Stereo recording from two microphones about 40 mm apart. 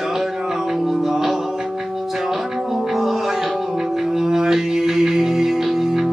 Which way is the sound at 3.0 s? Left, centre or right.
Centre.